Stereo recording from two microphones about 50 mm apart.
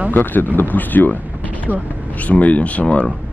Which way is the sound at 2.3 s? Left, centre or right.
Left.